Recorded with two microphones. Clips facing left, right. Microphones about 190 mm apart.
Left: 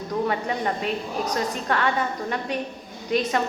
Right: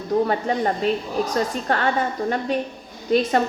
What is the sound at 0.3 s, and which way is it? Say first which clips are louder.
A woman's voice: right 4 dB; 35° right (ahead or behind).